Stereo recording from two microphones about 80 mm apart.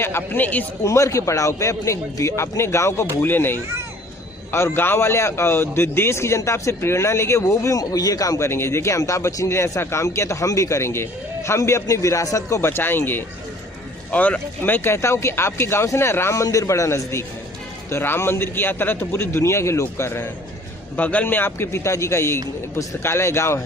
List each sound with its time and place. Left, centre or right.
0.0 s a man's voice: left
0.9 s speech: left
8.4 s a man's voice: left
20.9 s a man's voice: centre
22.7 s speech: left
23.0 s speech: left